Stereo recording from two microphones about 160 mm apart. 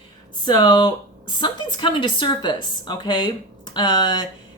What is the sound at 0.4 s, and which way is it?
A woman's voice, 30° left (ahead or behind).